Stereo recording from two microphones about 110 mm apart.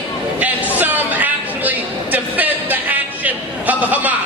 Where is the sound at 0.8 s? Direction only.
15° right (ahead or behind).